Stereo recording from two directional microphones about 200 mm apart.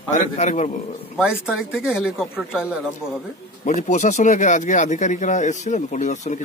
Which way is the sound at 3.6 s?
40° left (ahead or behind).